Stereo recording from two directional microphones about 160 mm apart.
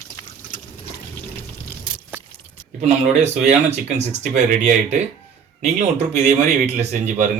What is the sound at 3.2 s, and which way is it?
A man's voice, 45° right (ahead or behind).